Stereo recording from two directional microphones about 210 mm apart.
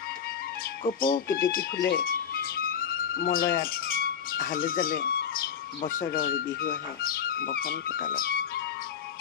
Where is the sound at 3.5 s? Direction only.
45° left (ahead or behind).